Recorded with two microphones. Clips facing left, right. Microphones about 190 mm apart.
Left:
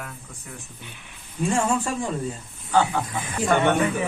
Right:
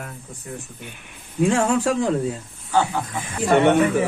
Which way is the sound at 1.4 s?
75° right (ahead or behind).